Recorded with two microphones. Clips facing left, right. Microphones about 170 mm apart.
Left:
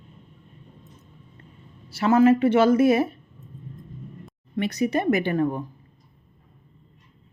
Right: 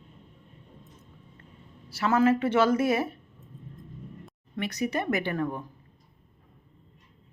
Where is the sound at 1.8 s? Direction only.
20° left (ahead or behind).